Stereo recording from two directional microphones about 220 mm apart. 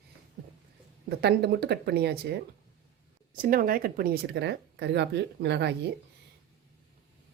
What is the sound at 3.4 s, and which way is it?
Speech, 40° right (ahead or behind).